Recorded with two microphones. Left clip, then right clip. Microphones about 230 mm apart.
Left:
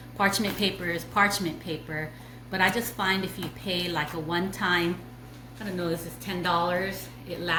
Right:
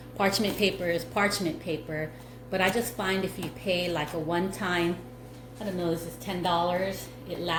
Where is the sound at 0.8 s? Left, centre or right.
Left.